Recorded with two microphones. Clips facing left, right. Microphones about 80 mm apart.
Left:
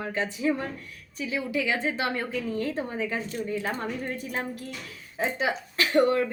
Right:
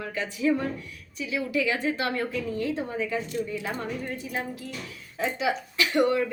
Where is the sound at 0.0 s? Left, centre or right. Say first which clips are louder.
Even; left.